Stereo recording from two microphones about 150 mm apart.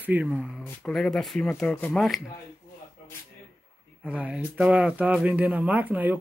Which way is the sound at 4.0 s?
10° right (ahead or behind).